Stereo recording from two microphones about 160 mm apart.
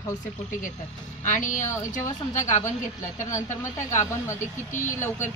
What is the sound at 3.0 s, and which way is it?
Speech, 20° left (ahead or behind).